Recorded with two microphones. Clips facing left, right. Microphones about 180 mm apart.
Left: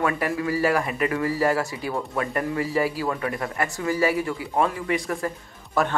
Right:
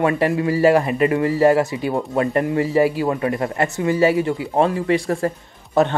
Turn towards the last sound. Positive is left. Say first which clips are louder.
# right 7 dB
turn(degrees=-20)  # may be behind; listen again after turning